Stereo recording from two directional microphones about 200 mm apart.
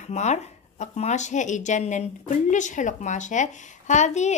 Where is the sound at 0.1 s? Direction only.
35° left (ahead or behind).